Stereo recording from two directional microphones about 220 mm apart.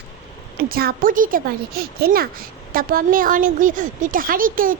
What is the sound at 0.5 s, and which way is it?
A woman's voice, 45° right (ahead or behind).